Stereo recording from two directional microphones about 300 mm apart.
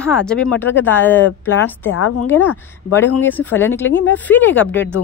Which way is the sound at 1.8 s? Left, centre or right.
Left.